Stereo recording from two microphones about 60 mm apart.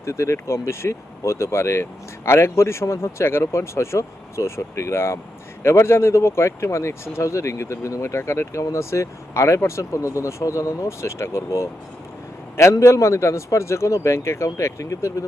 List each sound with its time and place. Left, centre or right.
0.0 s speech: left